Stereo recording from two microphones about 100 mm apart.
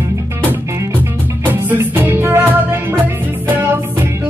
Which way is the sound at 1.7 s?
20° right (ahead or behind).